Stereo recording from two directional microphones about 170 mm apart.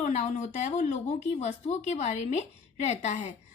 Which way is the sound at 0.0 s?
40° left (ahead or behind).